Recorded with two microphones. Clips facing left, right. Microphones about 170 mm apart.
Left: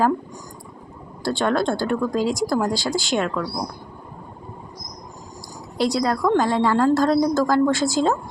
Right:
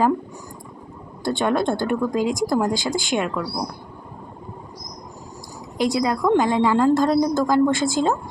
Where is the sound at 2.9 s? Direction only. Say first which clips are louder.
Even; 50° right (ahead or behind).